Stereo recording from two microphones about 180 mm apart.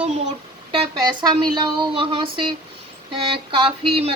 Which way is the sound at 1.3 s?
25° right (ahead or behind).